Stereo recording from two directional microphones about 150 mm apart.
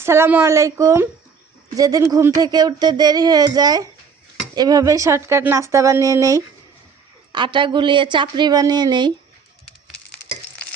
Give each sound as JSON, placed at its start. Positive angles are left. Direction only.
{"t": 0.0, "sound": "a woman's voice", "side_deg": -15}
{"t": 7.3, "sound": "speech", "side_deg": -30}